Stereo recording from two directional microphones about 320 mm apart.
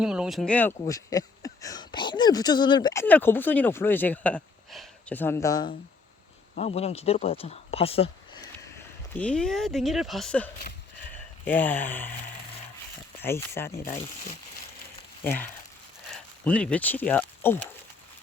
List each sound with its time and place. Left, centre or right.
0.0 s speech: centre
9.1 s speech: centre
13.1 s speech: centre
15.2 s speech: centre